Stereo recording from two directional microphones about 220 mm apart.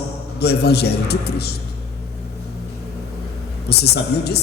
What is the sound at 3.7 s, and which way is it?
Music, 45° left (ahead or behind).